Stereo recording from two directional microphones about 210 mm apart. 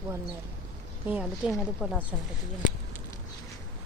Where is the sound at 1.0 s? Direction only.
5° right (ahead or behind).